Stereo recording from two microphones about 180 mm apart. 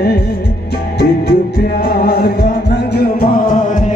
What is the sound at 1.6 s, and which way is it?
Music, 55° left (ahead or behind).